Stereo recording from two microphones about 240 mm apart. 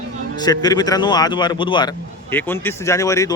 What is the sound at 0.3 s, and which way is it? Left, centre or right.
Speech, centre.